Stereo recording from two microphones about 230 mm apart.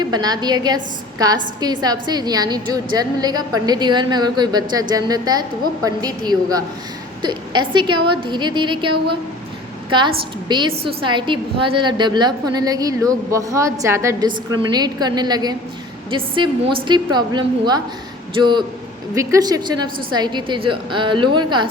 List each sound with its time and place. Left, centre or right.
0.0 s a woman's voice: centre
10.5 s a woman's voice: centre